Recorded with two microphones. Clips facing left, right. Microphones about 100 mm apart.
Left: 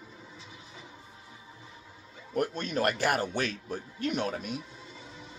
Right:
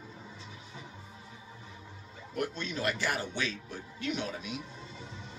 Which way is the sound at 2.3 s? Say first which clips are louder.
Left 5 dB; 45° left (ahead or behind).